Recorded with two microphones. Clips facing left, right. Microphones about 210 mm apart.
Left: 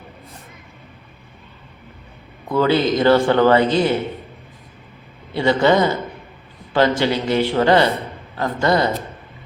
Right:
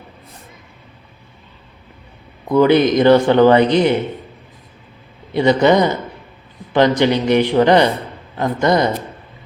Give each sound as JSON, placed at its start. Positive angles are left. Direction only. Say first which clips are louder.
{"t": 2.5, "sound": "speech", "louder": "right 5 dB", "side_deg": -20}
{"t": 5.3, "sound": "speech", "louder": "right 3 dB", "side_deg": -20}